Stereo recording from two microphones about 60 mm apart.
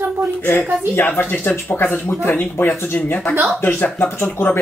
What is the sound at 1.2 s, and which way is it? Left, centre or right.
Speech, left.